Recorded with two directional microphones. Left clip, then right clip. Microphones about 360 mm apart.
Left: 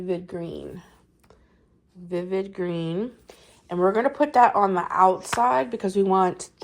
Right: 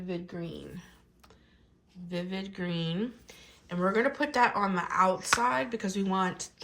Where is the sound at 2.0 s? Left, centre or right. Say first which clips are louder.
Left 10 dB; centre.